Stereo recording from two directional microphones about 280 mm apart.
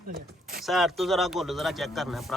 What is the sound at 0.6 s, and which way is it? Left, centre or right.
Speech, centre.